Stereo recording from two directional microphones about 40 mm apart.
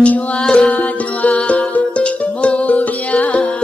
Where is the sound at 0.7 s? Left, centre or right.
Left.